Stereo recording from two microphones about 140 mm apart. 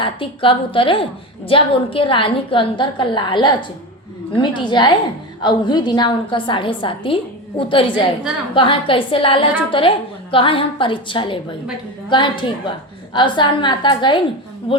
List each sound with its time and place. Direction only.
0.0 s a woman's voice: 40° left (ahead or behind)